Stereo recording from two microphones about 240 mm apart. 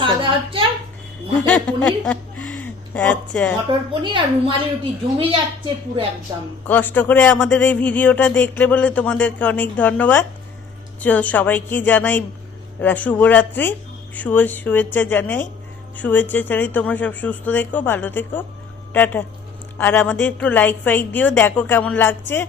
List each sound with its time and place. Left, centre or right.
0.0 s a sound: right
1.5 s speech: centre
3.7 s a woman's voice: centre
6.7 s speech: centre